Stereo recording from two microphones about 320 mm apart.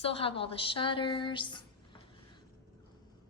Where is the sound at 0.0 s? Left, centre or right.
Centre.